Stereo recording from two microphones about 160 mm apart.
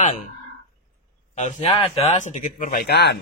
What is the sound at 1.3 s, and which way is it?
Speech, 40° left (ahead or behind).